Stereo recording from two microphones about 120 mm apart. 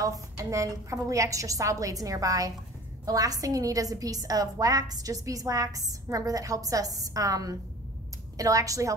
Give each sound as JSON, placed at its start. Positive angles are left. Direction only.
{"t": 0.0, "sound": "a woman's voice", "side_deg": -30}